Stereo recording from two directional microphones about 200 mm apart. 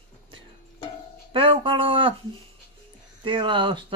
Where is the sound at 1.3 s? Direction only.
25° right (ahead or behind).